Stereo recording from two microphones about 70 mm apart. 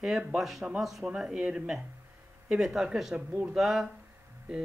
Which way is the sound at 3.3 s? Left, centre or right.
Right.